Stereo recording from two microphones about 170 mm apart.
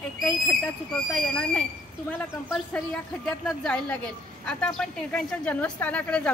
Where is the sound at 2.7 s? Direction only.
5° left (ahead or behind).